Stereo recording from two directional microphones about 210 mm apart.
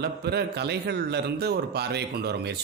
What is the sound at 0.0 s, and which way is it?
A man's voice, 50° right (ahead or behind).